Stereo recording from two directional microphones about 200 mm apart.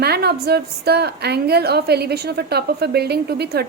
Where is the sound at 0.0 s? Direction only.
55° right (ahead or behind).